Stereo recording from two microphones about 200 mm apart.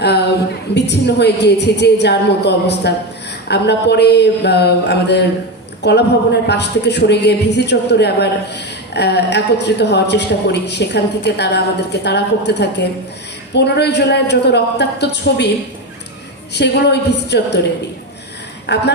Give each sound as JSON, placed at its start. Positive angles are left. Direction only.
{"t": 0.7, "sound": "a woman's voice", "side_deg": 60}
{"t": 16.6, "sound": "a woman's voice", "side_deg": 60}
{"t": 18.7, "sound": "a woman's voice", "side_deg": 60}